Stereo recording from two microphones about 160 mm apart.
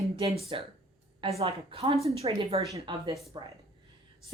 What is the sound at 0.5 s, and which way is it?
A woman's voice, 30° right (ahead or behind).